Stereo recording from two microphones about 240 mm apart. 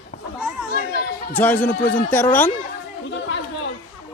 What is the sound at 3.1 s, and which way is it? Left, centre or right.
Chatter, left.